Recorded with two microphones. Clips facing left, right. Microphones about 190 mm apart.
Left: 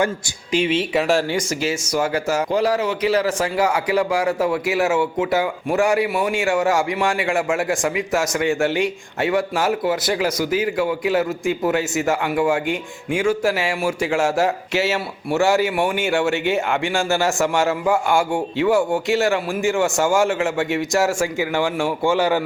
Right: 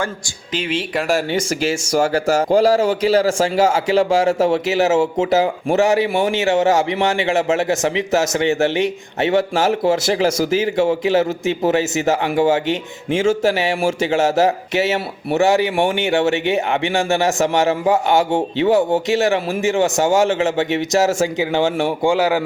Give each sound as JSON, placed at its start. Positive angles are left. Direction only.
{"t": 0.5, "sound": "speech", "side_deg": 5}
{"t": 1.9, "sound": "speech", "side_deg": -30}